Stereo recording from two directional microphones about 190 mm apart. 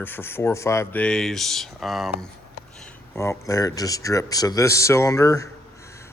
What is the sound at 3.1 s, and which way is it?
A man's voice, 15° left (ahead or behind).